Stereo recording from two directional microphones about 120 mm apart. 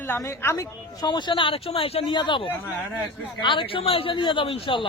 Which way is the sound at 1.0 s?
40° left (ahead or behind).